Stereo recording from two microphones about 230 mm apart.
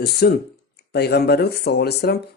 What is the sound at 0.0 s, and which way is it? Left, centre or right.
A man's voice, left.